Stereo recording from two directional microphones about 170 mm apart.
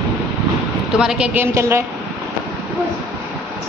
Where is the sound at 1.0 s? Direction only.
5° right (ahead or behind).